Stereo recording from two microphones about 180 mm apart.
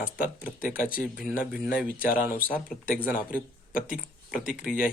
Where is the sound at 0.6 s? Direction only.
50° left (ahead or behind).